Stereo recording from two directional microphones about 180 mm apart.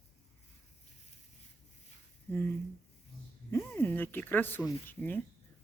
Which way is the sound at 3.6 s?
10° left (ahead or behind).